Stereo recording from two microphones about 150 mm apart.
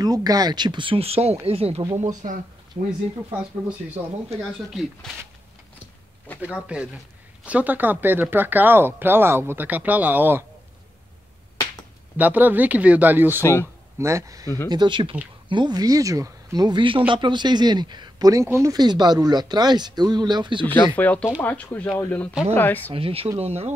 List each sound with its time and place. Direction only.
0.0 s speech: 25° right (ahead or behind); by 1.8 s 40° right (ahead or behind)
2.0 s speech: 55° right (ahead or behind)
5.1 s speech: 5° left (ahead or behind)
6.4 s speech: 5° right (ahead or behind)
12.2 s speech: 10° right (ahead or behind)
13.4 s speech: 15° left (ahead or behind)
13.9 s speech: 20° right (ahead or behind)
20.6 s speech: 10° left (ahead or behind)
22.9 s speech: 40° right (ahead or behind)